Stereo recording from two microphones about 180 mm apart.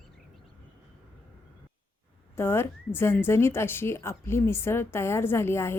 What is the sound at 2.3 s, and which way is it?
A woman's voice, 15° left (ahead or behind).